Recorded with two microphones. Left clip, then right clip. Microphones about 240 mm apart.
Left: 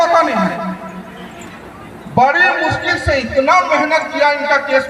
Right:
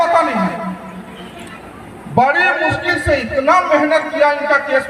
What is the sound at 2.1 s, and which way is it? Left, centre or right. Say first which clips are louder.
A man's voice: left 1 dB; left.